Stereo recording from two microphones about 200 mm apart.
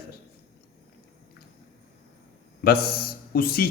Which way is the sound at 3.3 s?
50° left (ahead or behind).